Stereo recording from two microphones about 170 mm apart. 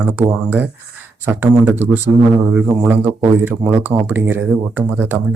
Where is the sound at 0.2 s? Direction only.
10° right (ahead or behind).